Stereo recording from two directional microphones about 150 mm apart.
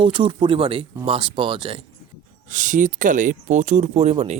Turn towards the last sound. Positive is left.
turn(degrees=-45)  # may be behind; listen again after turning